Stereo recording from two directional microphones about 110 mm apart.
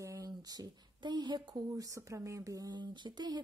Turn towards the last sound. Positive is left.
turn(degrees=-40)  # may be behind; listen again after turning